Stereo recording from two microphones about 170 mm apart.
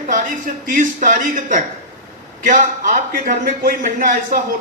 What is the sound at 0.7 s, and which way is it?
A man's voice, 50° right (ahead or behind).